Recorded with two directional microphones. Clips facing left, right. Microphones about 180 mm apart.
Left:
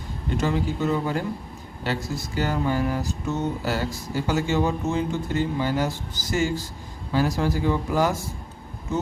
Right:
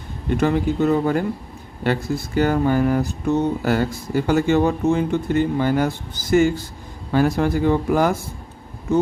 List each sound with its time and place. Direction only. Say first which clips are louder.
0.3 s speech: right 6 dB; 60° right (ahead or behind)